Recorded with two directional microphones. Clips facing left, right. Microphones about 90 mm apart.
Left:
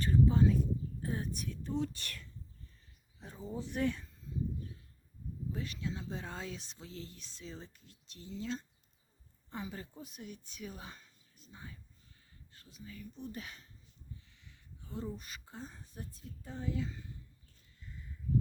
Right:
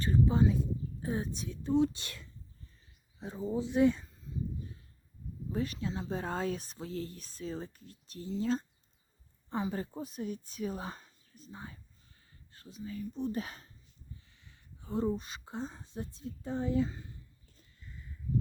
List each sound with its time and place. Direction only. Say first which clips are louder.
0.0 s speech: right 1 dB; 20° right (ahead or behind)
5.5 s speech: right 6 dB; 35° right (ahead or behind)
14.3 s a sound: even; 35° right (ahead or behind)
15.2 s speech: right 8 dB; 30° right (ahead or behind)